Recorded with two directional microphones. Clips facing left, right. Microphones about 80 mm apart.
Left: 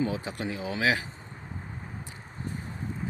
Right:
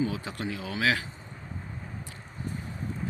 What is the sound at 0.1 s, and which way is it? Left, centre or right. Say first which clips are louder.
Speech: left 1 dB; left.